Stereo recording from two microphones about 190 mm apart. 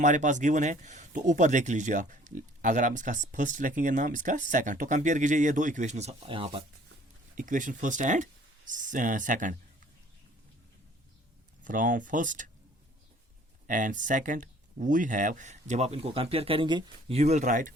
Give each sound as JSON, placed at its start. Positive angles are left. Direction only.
{"t": 0.0, "sound": "speech", "side_deg": -40}
{"t": 7.3, "sound": "speech", "side_deg": -45}
{"t": 11.6, "sound": "speech", "side_deg": -45}
{"t": 13.7, "sound": "speech", "side_deg": -45}